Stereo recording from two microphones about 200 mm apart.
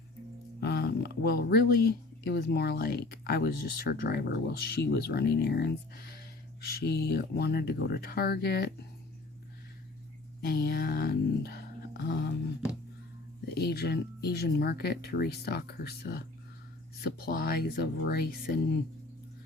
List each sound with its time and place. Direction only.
0.6 s speech: 55° left (ahead or behind)
10.4 s a sound: 50° left (ahead or behind)
13.5 s speech: 55° left (ahead or behind)